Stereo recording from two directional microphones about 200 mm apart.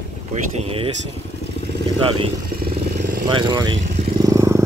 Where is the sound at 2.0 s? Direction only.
25° right (ahead or behind).